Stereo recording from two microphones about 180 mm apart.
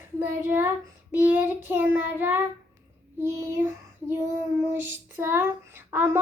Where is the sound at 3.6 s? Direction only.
15° right (ahead or behind).